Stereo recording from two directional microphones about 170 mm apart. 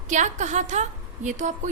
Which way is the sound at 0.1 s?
45° right (ahead or behind).